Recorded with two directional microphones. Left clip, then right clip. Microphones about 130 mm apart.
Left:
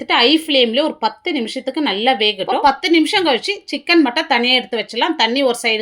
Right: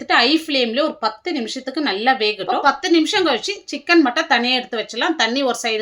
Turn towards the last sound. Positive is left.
turn(degrees=25)  # may be behind; listen again after turning